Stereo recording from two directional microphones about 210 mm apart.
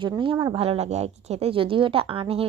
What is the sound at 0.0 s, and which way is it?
Speech, 25° right (ahead or behind).